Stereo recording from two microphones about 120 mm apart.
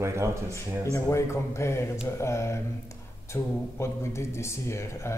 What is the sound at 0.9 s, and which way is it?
Speech, 25° left (ahead or behind).